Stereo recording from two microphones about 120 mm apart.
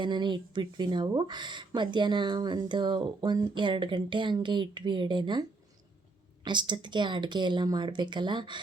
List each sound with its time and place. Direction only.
0.0 s speech: 40° right (ahead or behind)